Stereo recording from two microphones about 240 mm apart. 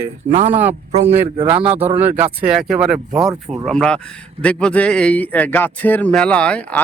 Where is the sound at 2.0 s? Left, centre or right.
Centre.